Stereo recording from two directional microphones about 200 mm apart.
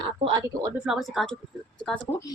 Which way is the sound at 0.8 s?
Centre (ahead or behind).